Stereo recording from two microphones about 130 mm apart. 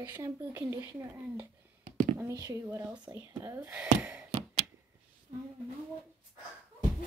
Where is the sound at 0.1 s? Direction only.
20° right (ahead or behind).